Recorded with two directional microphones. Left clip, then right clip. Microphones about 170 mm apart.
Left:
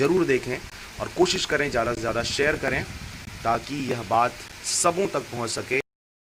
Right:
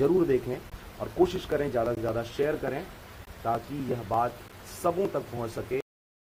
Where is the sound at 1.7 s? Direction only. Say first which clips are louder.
Left 3 dB; 35° left (ahead or behind).